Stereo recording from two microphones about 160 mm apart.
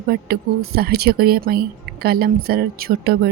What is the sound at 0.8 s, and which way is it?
Speech, 80° right.